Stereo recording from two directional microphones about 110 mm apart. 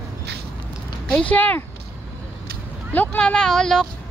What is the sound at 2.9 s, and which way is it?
Speech, 15° left (ahead or behind).